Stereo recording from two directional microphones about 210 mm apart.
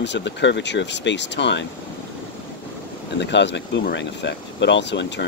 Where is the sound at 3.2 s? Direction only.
55° left (ahead or behind).